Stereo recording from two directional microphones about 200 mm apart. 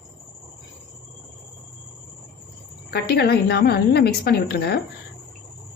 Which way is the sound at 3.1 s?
55° left (ahead or behind).